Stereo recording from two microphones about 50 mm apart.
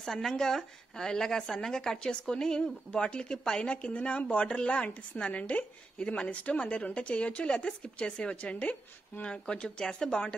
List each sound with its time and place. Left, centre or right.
0.0 s a woman's voice: centre